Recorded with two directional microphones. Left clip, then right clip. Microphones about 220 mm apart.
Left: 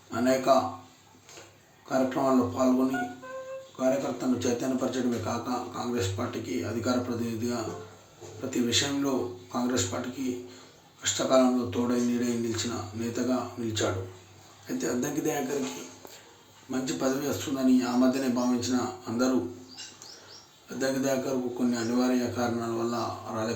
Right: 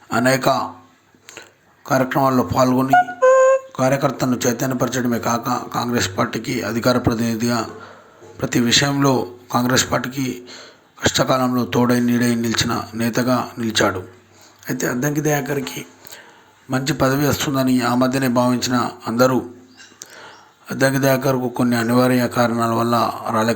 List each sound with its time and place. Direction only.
0.1 s speech: 40° right (ahead or behind)
1.9 s a man's voice: 35° right (ahead or behind)
3.8 s a man's voice: 40° right (ahead or behind)
16.7 s a man's voice: 35° right (ahead or behind)
20.7 s a man's voice: 35° right (ahead or behind)